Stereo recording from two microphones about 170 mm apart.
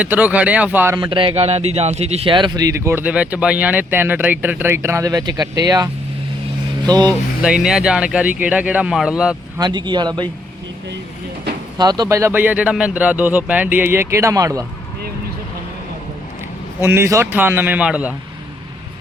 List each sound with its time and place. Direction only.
0.0 s speech: 10° right (ahead or behind)
0.9 s speech: 30° right (ahead or behind)
7.4 s speech: 5° right (ahead or behind)
9.6 s speech: 25° right (ahead or behind)
11.8 s speech: 25° right (ahead or behind)
16.8 s speech: 15° right (ahead or behind)